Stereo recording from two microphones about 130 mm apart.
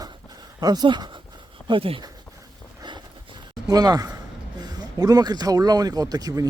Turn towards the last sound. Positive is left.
turn(degrees=-30)  # may be behind; listen again after turning